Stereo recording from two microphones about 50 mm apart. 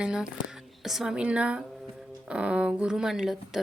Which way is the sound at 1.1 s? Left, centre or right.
Right.